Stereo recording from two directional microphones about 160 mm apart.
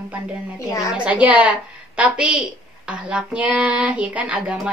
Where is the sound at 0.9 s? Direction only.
10° right (ahead or behind).